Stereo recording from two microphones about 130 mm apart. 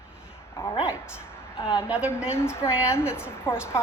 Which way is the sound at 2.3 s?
20° left (ahead or behind).